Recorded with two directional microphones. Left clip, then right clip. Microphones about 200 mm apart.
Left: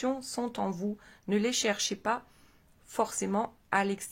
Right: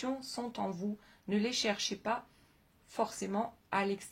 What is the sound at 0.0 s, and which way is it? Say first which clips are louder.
Speech: left 6 dB; 50° left (ahead or behind).